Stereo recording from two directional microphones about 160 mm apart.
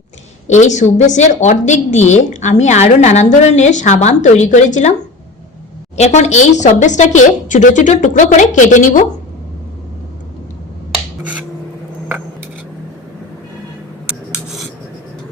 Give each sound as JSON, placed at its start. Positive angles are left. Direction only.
{"t": 0.4, "sound": "a woman's voice", "side_deg": 45}
{"t": 6.0, "sound": "a woman's voice", "side_deg": 45}
{"t": 14.1, "sound": "filing", "side_deg": -5}